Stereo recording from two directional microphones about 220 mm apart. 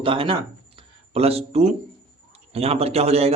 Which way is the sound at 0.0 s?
25° right (ahead or behind).